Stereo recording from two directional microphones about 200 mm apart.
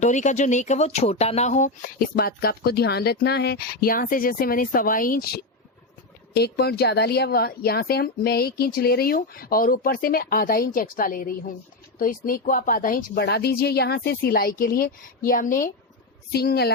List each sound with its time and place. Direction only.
0.0 s speech: 35° left (ahead or behind); by 16.7 s 55° left (ahead or behind)